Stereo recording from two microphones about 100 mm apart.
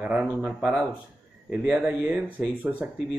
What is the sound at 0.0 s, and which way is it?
Speech, 15° right (ahead or behind).